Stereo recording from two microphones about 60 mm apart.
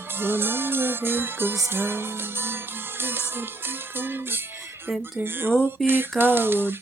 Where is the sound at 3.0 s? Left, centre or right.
Right.